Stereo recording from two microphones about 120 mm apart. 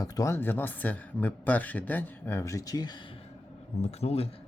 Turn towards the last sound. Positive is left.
turn(degrees=60)  # may be behind; listen again after turning